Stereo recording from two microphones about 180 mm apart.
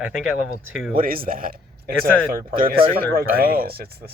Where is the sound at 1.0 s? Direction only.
55° right (ahead or behind).